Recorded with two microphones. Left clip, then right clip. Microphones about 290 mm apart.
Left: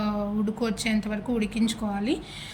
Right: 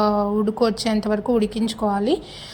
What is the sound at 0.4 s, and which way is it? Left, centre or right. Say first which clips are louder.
A woman's voice: right 8 dB; centre.